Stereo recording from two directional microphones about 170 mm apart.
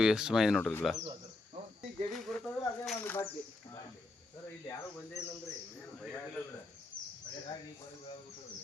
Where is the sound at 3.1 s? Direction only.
15° left (ahead or behind).